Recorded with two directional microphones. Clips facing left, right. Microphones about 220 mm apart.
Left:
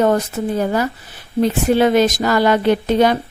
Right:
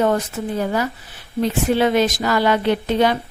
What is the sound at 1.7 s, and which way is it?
Speech, 45° left (ahead or behind).